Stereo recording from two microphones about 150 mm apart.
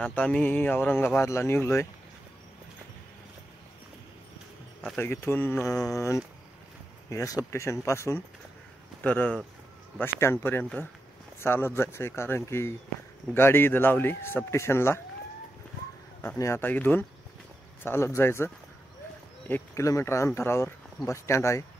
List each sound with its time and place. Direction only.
0.0 s speech: 10° left (ahead or behind)
4.9 s speech: 15° left (ahead or behind)
16.2 s speech: 20° left (ahead or behind)